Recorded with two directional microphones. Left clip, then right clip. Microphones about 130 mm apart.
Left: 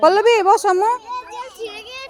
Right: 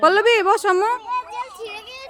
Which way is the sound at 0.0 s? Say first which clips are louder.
Left 2 dB; centre (ahead or behind).